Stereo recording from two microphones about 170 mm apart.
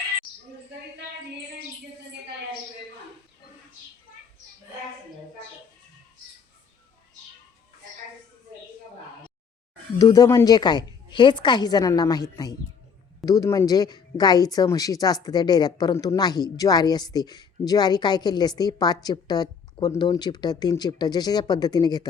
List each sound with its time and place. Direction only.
10.0 s speech: 20° left (ahead or behind)